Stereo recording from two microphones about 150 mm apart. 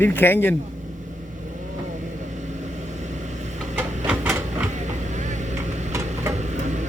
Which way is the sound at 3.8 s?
15° right (ahead or behind).